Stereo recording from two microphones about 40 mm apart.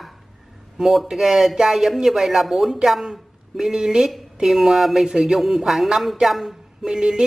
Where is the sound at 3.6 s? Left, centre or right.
Centre.